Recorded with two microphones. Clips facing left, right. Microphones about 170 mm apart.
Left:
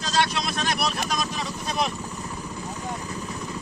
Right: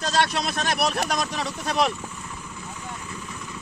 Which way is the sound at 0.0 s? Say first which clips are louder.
Right 1 dB; 60° right (ahead or behind).